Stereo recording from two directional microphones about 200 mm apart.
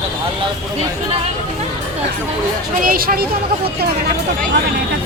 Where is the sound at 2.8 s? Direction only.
45° right (ahead or behind).